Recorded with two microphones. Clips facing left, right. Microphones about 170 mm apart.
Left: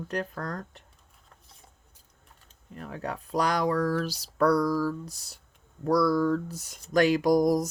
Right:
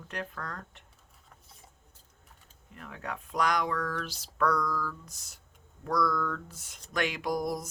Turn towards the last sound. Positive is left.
turn(degrees=40)  # may be behind; listen again after turning